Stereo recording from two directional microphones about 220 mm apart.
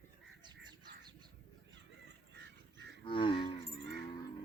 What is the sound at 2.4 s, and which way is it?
Duck, 50° right (ahead or behind).